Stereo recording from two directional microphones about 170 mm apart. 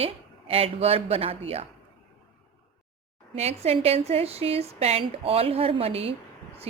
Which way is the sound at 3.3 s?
40° right (ahead or behind).